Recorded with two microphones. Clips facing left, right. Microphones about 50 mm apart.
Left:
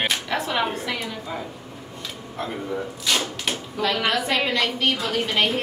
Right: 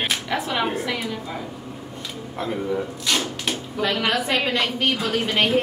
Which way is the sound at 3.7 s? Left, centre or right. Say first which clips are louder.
Even; centre.